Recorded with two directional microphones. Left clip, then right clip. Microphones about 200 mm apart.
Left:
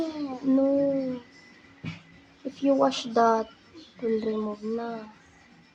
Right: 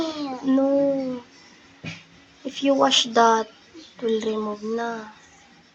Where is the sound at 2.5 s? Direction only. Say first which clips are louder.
Right 4 dB; centre (ahead or behind).